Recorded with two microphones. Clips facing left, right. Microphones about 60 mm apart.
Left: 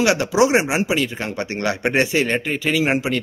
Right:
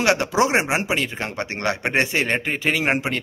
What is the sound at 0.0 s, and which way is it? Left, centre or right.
A man's voice, right.